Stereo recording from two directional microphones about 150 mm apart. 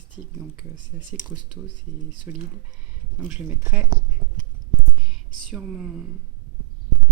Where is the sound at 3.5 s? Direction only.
15° right (ahead or behind).